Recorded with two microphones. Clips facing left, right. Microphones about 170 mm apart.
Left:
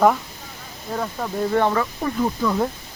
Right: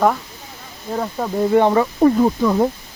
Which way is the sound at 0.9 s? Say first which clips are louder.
Right 4 dB; 20° right (ahead or behind).